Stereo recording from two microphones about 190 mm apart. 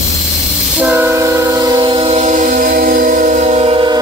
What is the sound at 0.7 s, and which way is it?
Train, 10° right (ahead or behind).